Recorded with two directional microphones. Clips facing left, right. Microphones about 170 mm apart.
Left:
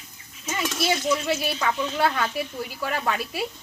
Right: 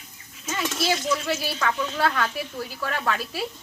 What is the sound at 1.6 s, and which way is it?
A woman's voice, 20° left (ahead or behind).